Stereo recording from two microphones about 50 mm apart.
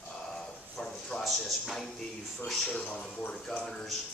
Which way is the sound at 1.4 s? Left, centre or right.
Centre.